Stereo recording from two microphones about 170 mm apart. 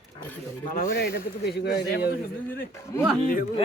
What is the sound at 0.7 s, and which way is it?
A man's voice, 60° left (ahead or behind).